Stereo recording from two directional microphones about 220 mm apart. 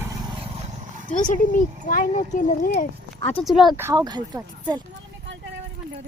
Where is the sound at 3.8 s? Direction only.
15° right (ahead or behind).